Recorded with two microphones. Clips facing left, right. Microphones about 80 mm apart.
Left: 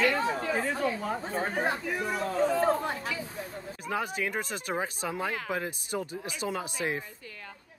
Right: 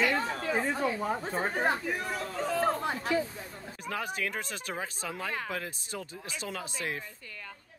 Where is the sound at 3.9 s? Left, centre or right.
Centre.